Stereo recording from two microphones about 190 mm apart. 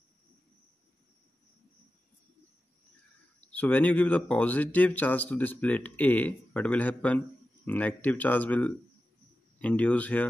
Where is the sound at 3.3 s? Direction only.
10° left (ahead or behind).